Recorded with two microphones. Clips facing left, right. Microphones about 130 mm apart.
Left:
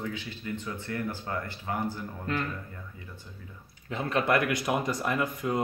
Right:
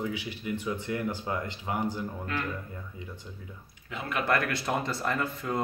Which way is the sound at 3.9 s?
30° left (ahead or behind).